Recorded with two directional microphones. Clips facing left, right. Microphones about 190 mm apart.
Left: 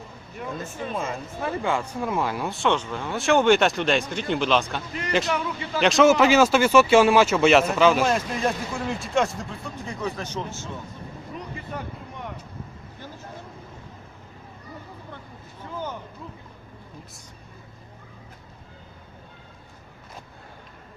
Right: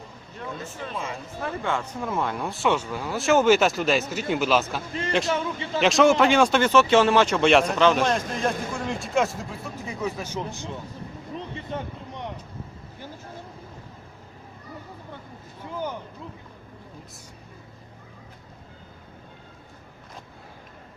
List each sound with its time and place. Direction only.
1.4 s speech: 10° left (ahead or behind)
5.3 s a man's voice: 25° right (ahead or behind)
5.8 s speech: centre (ahead or behind)
11.3 s a sound: 25° right (ahead or behind)